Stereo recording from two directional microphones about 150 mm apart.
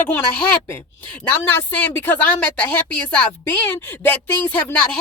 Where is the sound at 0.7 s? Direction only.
15° left (ahead or behind).